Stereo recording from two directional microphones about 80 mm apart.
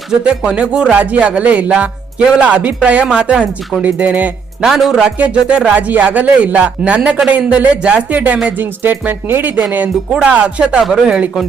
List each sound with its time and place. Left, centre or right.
0.3 s music: centre
3.8 s speech: centre
4.6 s speech: centre
5.1 s music: centre
8.4 s speech: right
9.7 s music: centre